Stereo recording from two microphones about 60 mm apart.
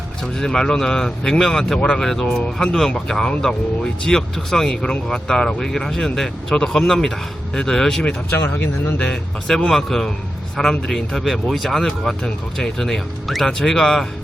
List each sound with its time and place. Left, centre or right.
0.3 s speech: centre
8.3 s speech: left
9.6 s speech: centre